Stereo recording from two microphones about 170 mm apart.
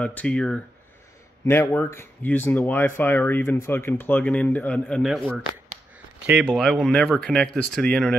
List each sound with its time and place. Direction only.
0.0 s speech: 10° left (ahead or behind)
6.4 s speech: centre (ahead or behind)